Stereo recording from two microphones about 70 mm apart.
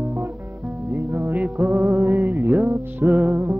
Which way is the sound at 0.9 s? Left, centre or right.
Right.